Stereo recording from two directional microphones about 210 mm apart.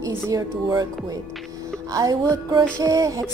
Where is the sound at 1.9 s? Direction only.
15° right (ahead or behind).